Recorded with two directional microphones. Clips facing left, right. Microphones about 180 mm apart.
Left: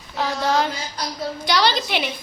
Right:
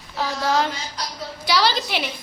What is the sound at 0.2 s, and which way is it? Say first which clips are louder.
Child singing: left 1 dB; centre (ahead or behind).